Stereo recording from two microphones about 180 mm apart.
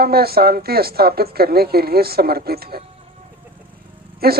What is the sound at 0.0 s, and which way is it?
Speech, 60° right (ahead or behind).